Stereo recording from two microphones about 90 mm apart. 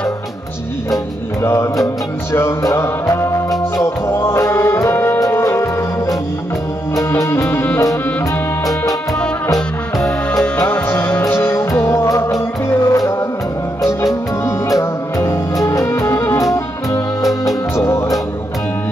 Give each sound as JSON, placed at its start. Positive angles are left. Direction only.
{"t": 1.4, "sound": "music", "side_deg": 35}
{"t": 7.2, "sound": "music", "side_deg": 30}
{"t": 10.9, "sound": "music", "side_deg": 20}
{"t": 11.2, "sound": "music", "side_deg": 30}
{"t": 14.4, "sound": "music", "side_deg": 35}
{"t": 17.2, "sound": "music", "side_deg": 0}
{"t": 17.7, "sound": "music", "side_deg": 30}